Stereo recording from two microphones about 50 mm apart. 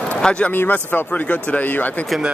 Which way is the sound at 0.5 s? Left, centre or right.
Left.